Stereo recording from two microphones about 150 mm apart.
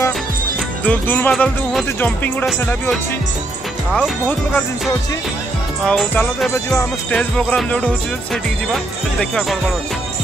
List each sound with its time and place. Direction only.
0.8 s music: 10° left (ahead or behind)
1.3 s music: centre (ahead or behind)
2.0 s music: 10° left (ahead or behind)
5.9 s music: 5° left (ahead or behind)
6.5 s music: 15° left (ahead or behind)
7.2 s music: 5° left (ahead or behind)
9.2 s music: 5° left (ahead or behind)